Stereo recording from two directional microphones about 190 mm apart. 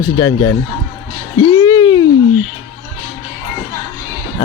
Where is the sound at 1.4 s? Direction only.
25° left (ahead or behind).